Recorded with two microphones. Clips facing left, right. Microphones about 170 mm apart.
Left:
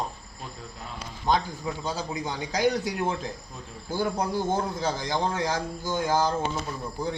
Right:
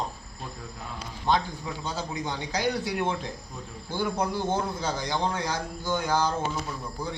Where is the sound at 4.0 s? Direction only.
40° left (ahead or behind).